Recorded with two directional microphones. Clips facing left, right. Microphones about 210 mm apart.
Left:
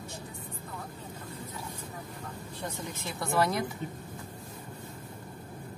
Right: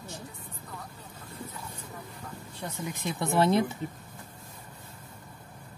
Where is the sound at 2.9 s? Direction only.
20° right (ahead or behind).